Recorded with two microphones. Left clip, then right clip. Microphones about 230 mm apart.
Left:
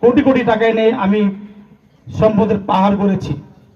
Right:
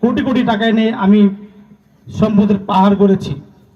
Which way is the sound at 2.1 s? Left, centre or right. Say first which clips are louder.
Left 3 dB; right.